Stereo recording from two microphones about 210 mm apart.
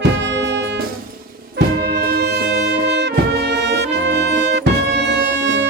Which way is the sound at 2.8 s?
55° right (ahead or behind).